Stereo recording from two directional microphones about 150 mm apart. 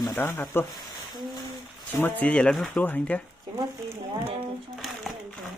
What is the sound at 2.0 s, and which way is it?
Speech, 10° left (ahead or behind).